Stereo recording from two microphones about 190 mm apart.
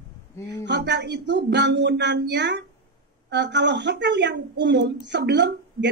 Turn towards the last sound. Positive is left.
turn(degrees=-65)  # may be behind; listen again after turning